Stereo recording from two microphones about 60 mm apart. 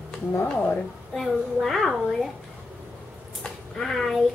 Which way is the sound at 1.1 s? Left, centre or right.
Centre.